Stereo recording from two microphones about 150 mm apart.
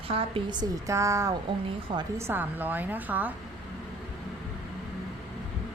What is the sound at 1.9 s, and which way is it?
Speech, 35° right (ahead or behind).